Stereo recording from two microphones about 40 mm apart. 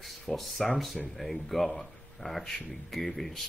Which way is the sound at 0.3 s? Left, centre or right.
Centre.